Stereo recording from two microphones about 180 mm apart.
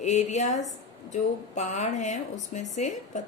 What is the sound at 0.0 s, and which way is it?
A woman's voice, 40° left (ahead or behind).